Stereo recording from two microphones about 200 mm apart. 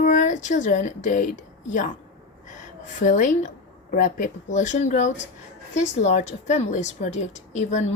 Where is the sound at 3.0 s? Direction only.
40° left (ahead or behind).